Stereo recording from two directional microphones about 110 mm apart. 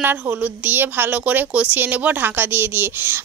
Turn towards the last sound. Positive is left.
turn(degrees=-20)  # may be behind; listen again after turning